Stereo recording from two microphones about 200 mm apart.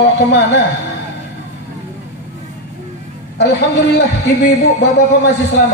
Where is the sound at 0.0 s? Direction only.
55° left (ahead or behind).